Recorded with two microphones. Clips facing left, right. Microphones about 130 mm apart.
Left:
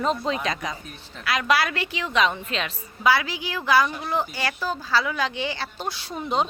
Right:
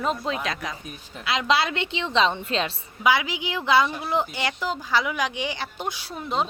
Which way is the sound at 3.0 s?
15° right (ahead or behind).